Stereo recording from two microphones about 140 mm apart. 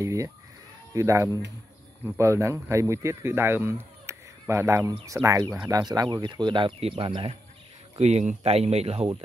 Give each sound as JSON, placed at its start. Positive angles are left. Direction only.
{"t": 0.0, "sound": "bleat", "side_deg": -25}
{"t": 0.9, "sound": "speech", "side_deg": -20}
{"t": 8.0, "sound": "speech", "side_deg": -55}